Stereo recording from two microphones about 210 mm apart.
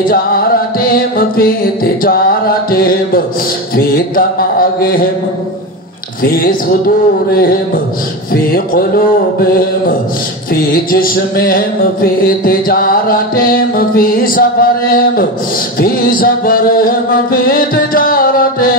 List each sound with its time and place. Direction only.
0.0 s mantra: 45° left (ahead or behind)
6.2 s mantra: 45° left (ahead or behind)
10.5 s mantra: 45° left (ahead or behind)